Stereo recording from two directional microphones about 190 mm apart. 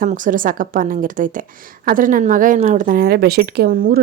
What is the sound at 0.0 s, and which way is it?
A woman's voice, 45° right (ahead or behind).